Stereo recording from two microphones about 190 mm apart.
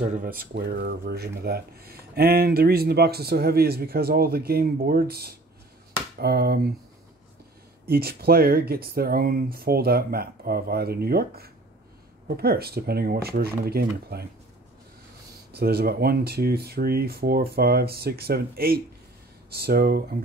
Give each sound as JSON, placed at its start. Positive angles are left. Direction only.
{"t": 0.0, "sound": "speech", "side_deg": -45}
{"t": 7.8, "sound": "speech", "side_deg": -55}
{"t": 15.5, "sound": "speech", "side_deg": -55}